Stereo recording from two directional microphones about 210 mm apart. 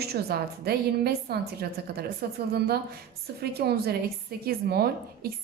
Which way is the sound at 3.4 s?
50° right (ahead or behind).